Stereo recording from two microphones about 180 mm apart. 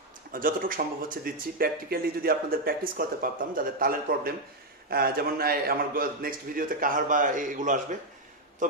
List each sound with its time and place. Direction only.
0.3 s speech: 50° right (ahead or behind)